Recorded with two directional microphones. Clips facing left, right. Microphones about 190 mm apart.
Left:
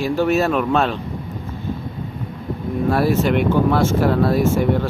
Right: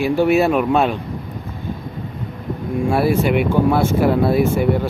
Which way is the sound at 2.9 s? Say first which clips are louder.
Right 1 dB; 10° right (ahead or behind).